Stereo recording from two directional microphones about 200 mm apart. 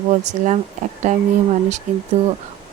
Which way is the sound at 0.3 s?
35° right (ahead or behind).